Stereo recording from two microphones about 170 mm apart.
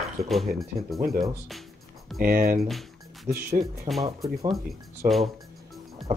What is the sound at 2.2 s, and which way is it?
Speech, 55° right (ahead or behind).